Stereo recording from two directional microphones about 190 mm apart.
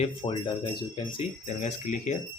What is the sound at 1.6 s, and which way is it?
Speech, 40° left (ahead or behind).